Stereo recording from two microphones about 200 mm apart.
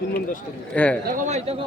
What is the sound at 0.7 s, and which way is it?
Speech, 5° left (ahead or behind).